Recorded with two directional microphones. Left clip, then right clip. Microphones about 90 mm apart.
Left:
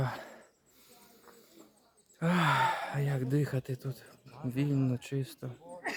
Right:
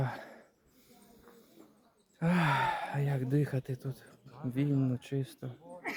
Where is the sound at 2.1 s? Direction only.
30° left (ahead or behind).